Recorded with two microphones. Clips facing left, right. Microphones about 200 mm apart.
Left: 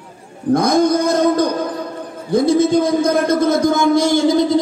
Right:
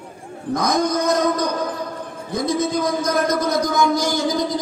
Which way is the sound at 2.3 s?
30° left (ahead or behind).